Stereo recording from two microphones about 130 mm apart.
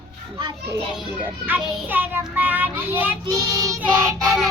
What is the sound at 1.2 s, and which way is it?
Child singing, 15° right (ahead or behind).